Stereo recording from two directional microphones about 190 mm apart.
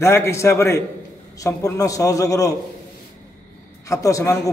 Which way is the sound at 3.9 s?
15° left (ahead or behind).